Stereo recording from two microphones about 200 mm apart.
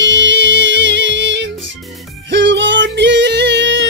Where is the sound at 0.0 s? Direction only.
65° right (ahead or behind).